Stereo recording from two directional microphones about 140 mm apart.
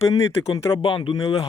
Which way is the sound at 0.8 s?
35° left (ahead or behind).